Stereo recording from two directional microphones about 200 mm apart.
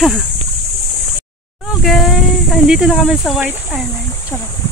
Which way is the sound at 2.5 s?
Centre (ahead or behind).